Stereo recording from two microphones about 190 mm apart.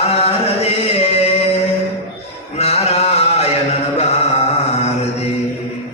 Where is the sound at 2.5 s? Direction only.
35° left (ahead or behind).